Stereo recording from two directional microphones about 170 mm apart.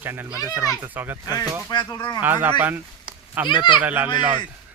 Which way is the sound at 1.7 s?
25° left (ahead or behind).